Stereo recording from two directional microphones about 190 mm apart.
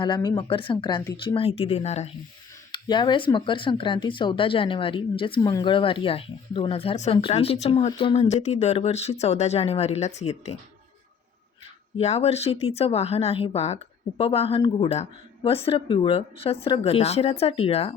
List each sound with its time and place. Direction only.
0.0 s speech: 20° left (ahead or behind)
2.7 s speech: 25° left (ahead or behind)
11.9 s speech: 35° left (ahead or behind)